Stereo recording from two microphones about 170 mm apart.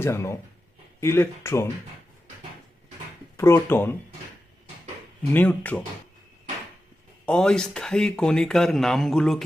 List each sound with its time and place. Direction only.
0.0 s speech: 15° left (ahead or behind)
3.3 s speech: 15° left (ahead or behind)
5.3 s speech: 10° left (ahead or behind)
7.3 s speech: 5° left (ahead or behind)